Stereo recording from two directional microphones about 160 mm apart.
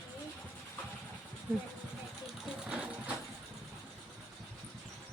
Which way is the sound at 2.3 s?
5° right (ahead or behind).